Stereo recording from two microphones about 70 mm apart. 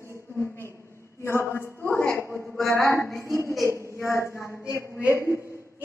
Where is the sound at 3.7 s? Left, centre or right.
Right.